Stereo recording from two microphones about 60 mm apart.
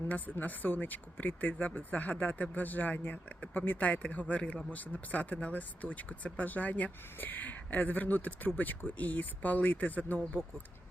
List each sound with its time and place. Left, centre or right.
0.1 s speech: left